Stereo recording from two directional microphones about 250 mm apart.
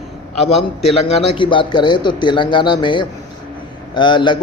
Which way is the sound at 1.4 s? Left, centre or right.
Centre.